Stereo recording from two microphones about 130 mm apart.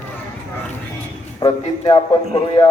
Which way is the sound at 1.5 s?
40° left (ahead or behind).